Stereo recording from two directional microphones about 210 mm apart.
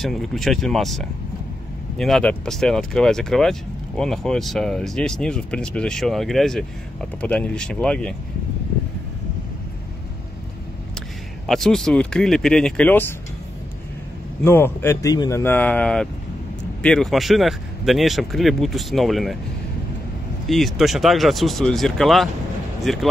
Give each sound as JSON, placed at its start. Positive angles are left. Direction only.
{"t": 0.0, "sound": "speech", "side_deg": 0}
{"t": 11.0, "sound": "speech", "side_deg": 0}
{"t": 14.4, "sound": "speech", "side_deg": 10}
{"t": 20.4, "sound": "speech", "side_deg": 0}